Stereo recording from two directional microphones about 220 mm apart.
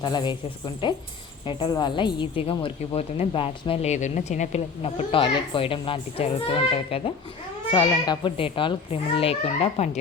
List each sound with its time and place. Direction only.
0.0 s a woman's voice: 20° left (ahead or behind)
1.5 s a woman's voice: 20° left (ahead or behind)